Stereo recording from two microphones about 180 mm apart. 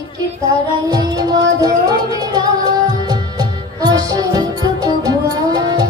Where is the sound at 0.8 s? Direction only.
20° right (ahead or behind).